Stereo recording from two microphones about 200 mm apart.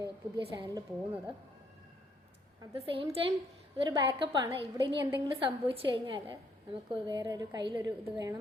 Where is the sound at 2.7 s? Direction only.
30° right (ahead or behind).